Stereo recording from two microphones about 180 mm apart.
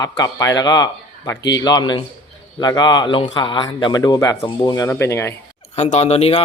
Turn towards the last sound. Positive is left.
turn(degrees=35)  # may be behind; listen again after turning